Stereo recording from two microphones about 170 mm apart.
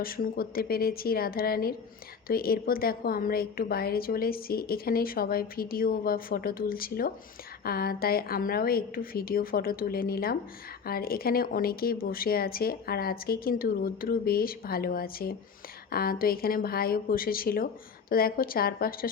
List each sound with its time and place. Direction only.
0.0 s a woman's voice: 60° left (ahead or behind)